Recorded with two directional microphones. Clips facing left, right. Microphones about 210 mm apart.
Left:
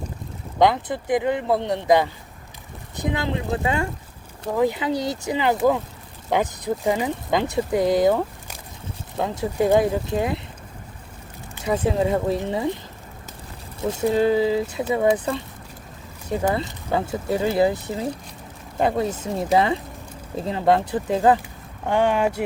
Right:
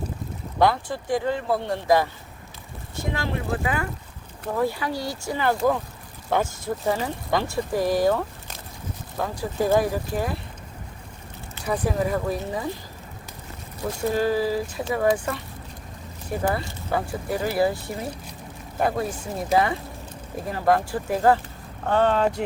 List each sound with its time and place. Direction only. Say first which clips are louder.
0.6 s speech: left 2 dB; 20° left (ahead or behind)
11.5 s speech: left 3 dB; 25° left (ahead or behind)
13.8 s speech: left 4 dB; 20° left (ahead or behind)
16.4 s speech: left 2 dB; 20° left (ahead or behind)